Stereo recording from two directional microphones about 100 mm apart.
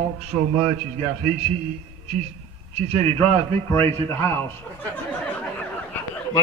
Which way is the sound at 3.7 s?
25° left (ahead or behind).